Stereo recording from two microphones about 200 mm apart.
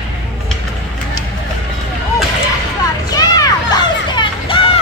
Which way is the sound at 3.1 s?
20° left (ahead or behind).